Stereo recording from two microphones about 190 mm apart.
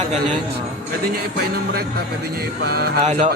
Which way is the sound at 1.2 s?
55° right (ahead or behind).